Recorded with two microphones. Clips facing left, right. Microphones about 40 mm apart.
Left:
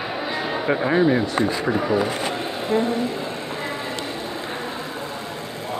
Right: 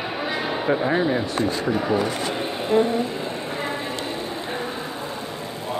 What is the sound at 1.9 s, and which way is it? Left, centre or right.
Speech, centre.